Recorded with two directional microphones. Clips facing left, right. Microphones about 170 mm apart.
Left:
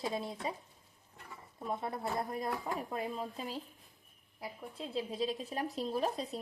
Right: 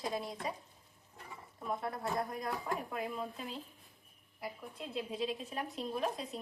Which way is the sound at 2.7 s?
25° left (ahead or behind).